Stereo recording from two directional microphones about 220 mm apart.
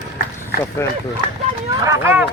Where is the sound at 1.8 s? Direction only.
10° right (ahead or behind).